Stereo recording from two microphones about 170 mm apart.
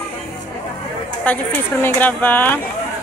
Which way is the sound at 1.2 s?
10° left (ahead or behind).